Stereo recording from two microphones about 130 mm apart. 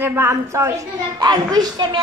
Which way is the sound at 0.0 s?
15° right (ahead or behind).